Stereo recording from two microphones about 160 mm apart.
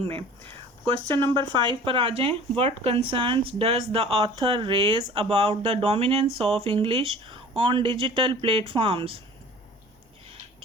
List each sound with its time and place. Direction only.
0.0 s speech: 35° right (ahead or behind)